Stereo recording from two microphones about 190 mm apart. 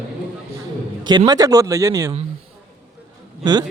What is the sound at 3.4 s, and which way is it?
Speech, 20° right (ahead or behind).